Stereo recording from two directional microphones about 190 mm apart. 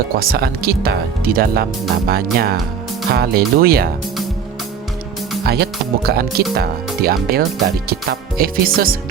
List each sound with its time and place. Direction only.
0.2 s speech: 50° right (ahead or behind)
5.5 s speech: 55° right (ahead or behind)